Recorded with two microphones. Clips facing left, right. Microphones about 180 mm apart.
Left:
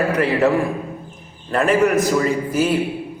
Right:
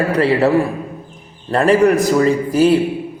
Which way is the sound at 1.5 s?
35° right (ahead or behind).